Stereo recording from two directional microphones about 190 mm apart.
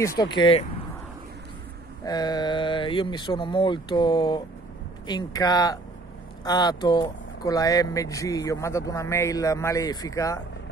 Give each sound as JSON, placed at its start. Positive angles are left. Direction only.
{"t": 0.2, "sound": "speech", "side_deg": 25}
{"t": 2.0, "sound": "speech", "side_deg": 20}